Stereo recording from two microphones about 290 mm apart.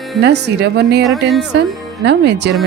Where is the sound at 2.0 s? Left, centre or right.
Right.